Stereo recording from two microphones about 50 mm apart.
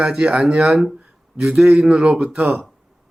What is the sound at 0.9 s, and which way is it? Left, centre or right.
Speech, centre.